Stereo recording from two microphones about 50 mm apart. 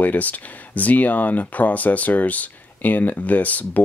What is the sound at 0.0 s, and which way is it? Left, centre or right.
Speech, left.